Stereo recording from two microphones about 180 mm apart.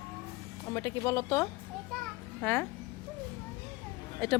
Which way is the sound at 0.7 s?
15° left (ahead or behind).